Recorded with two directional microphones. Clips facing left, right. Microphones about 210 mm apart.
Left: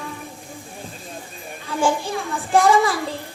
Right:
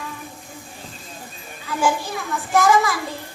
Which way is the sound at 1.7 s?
30° left (ahead or behind).